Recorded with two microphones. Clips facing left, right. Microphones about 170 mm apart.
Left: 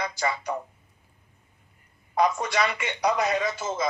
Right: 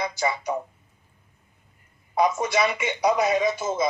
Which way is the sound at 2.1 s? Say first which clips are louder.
Right 2 dB; 10° right (ahead or behind).